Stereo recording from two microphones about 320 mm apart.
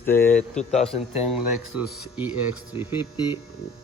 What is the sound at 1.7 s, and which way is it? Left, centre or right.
Speech, left.